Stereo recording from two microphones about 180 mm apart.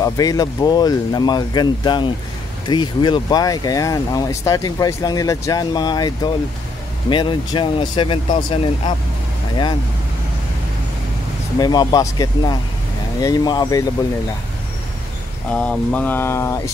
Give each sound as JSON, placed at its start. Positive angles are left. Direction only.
{"t": 0.0, "sound": "speech", "side_deg": 20}
{"t": 11.6, "sound": "speech", "side_deg": 20}
{"t": 15.5, "sound": "speech", "side_deg": 5}